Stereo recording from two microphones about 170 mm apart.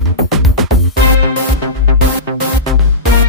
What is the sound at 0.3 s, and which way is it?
Music, centre (ahead or behind).